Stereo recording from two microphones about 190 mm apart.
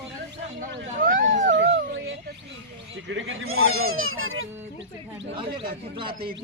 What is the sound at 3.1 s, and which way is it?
Speech, 80° right.